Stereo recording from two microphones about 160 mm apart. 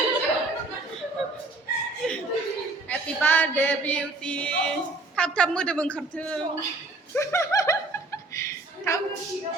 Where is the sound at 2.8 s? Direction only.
10° left (ahead or behind).